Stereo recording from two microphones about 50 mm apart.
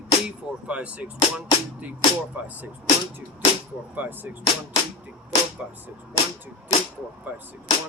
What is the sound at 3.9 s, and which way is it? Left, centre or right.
Speech, right.